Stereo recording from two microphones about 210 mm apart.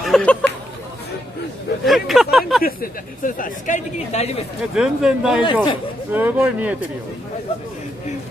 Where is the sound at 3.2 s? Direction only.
35° left (ahead or behind).